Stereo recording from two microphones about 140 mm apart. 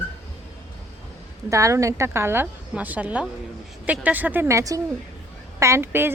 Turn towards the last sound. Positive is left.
turn(degrees=-15)  # may be behind; listen again after turning